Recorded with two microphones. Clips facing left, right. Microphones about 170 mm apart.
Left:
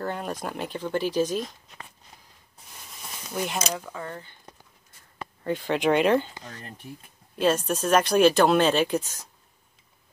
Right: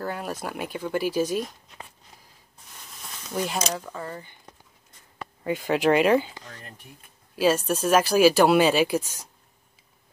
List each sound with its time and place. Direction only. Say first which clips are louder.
0.0 s speech: even; 5° right (ahead or behind)
2.7 s speech: left 1 dB; 5° left (ahead or behind)
5.4 s speech: right 2 dB; 5° right (ahead or behind)
7.3 s speech: right 1 dB; 5° right (ahead or behind)